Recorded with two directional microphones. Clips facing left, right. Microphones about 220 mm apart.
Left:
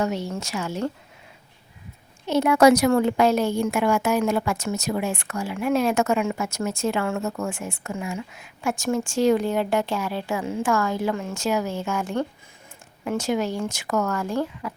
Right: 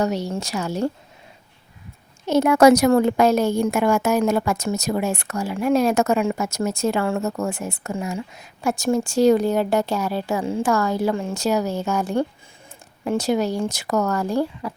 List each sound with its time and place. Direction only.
0.0 s a woman's voice: 40° right (ahead or behind)
2.2 s a woman's voice: 45° right (ahead or behind)